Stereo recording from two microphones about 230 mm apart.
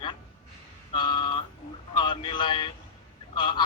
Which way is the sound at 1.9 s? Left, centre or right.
Centre.